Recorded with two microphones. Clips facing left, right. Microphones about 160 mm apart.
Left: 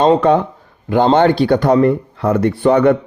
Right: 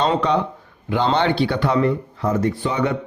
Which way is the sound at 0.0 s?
45° left (ahead or behind).